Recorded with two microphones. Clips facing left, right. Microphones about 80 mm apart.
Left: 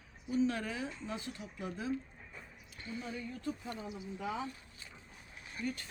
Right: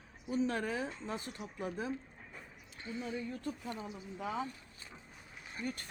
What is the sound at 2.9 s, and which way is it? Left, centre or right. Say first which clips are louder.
Speech: right 2 dB; right.